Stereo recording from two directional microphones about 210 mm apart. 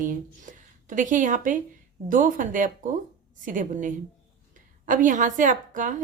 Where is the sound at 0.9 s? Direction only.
40° right (ahead or behind).